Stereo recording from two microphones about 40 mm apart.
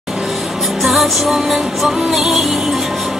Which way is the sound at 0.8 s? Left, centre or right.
Centre.